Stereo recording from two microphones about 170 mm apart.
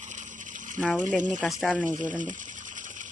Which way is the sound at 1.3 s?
5° left (ahead or behind).